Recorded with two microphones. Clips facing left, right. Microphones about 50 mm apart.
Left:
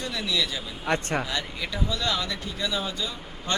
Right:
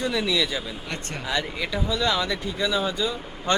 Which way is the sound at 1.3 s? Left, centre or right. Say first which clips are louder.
Right 4 dB; centre.